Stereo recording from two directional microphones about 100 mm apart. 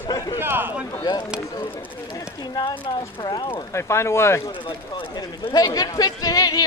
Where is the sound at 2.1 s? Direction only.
40° left (ahead or behind).